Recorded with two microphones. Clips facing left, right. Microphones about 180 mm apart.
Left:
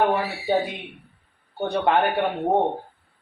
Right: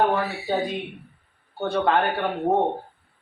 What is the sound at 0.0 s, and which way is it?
Speech, 20° left (ahead or behind).